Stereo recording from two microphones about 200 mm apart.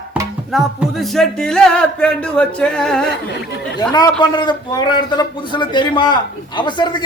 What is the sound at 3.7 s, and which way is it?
A man's voice, 20° left (ahead or behind).